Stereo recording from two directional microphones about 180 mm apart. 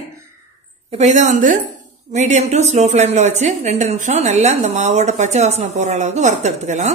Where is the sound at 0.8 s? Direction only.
40° right (ahead or behind).